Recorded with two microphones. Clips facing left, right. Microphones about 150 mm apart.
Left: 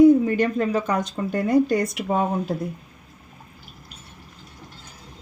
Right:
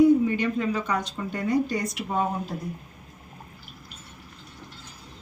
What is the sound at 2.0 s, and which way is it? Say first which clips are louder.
Speech: left 4 dB; 55° left (ahead or behind).